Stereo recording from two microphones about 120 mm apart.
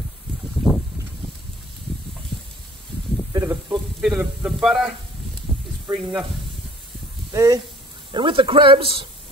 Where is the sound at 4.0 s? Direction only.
5° right (ahead or behind).